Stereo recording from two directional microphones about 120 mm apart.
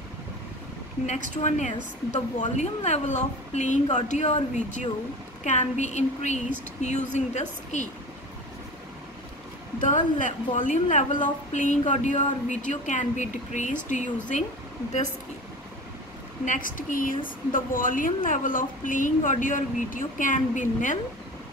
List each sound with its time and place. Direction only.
1.0 s a woman's voice: 85° left
9.8 s a woman's voice: 90° left
16.4 s a woman's voice: 90° left